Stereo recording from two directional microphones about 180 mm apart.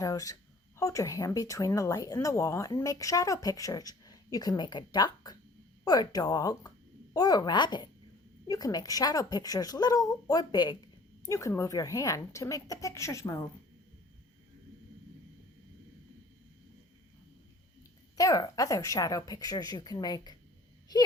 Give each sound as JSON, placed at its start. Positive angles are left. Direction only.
{"t": 0.0, "sound": "a woman's voice", "side_deg": 20}
{"t": 18.2, "sound": "a woman's voice", "side_deg": 20}